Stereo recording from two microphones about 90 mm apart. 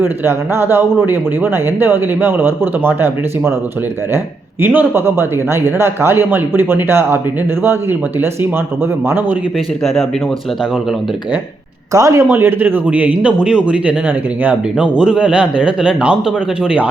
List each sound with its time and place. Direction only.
0.0 s a man's voice: 25° right (ahead or behind)
4.6 s a man's voice: 20° right (ahead or behind)
9.8 s speech: centre (ahead or behind)
11.9 s speech: 40° right (ahead or behind)
12.3 s a man's voice: 25° right (ahead or behind)